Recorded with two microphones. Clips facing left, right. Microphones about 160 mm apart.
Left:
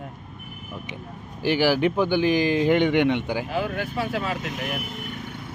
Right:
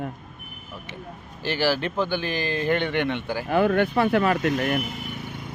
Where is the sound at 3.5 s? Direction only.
60° right (ahead or behind).